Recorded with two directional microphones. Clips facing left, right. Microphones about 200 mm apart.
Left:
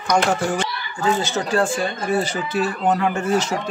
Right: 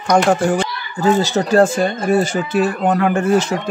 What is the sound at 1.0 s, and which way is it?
Speech, 35° right (ahead or behind).